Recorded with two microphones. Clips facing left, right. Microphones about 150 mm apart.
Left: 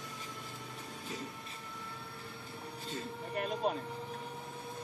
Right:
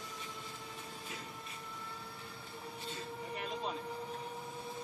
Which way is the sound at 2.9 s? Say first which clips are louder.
Left 5 dB; 55° left (ahead or behind).